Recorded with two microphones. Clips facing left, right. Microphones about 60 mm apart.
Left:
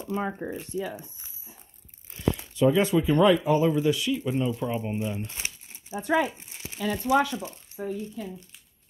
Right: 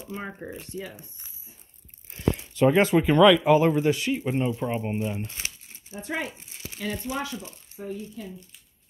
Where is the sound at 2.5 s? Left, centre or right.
Right.